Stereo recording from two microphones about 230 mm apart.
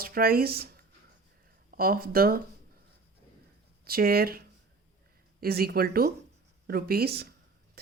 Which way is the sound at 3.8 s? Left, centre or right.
Right.